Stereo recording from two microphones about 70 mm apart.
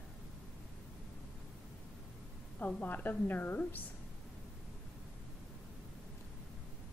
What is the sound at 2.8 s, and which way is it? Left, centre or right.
A woman's voice, left.